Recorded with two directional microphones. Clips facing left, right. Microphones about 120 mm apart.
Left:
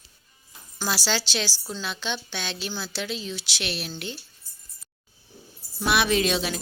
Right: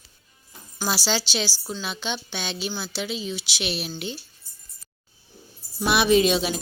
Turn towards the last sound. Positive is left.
turn(degrees=-15)  # may be behind; listen again after turning